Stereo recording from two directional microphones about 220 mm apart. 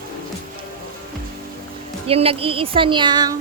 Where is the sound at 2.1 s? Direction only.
25° right (ahead or behind).